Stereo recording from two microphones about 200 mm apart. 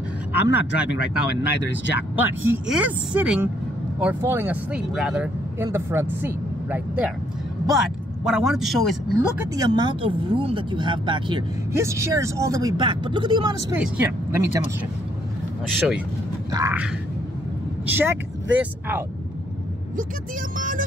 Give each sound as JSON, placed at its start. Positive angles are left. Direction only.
{"t": 0.3, "sound": "speech", "side_deg": -10}
{"t": 9.6, "sound": "speech", "side_deg": -20}
{"t": 16.5, "sound": "speech", "side_deg": -15}
{"t": 17.8, "sound": "speech", "side_deg": -10}
{"t": 20.5, "sound": "speech", "side_deg": -40}